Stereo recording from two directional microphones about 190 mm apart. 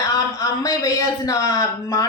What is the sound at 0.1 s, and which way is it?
Speech, 15° left (ahead or behind).